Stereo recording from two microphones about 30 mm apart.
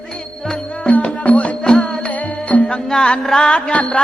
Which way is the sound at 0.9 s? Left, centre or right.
Left.